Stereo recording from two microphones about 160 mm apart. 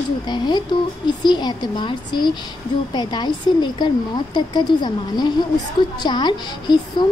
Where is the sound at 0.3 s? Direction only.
25° left (ahead or behind).